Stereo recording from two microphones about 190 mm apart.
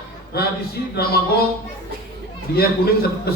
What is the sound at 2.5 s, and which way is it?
Speech, 55° left (ahead or behind).